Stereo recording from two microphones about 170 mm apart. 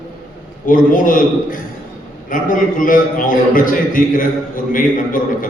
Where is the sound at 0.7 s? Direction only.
55° left (ahead or behind).